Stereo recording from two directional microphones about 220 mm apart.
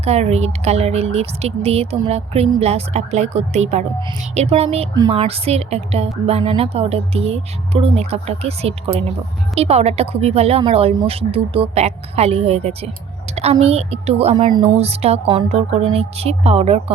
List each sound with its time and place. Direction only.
0.0 s a woman's voice: 30° right (ahead or behind)